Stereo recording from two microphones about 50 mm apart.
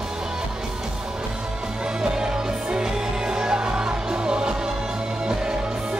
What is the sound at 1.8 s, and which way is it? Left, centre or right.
Music, centre.